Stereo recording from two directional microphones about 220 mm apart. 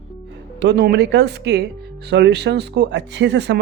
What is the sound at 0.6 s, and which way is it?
Speech, 50° right (ahead or behind).